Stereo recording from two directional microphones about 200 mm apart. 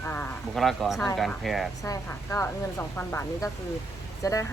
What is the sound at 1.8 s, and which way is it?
Speech, 15° left (ahead or behind).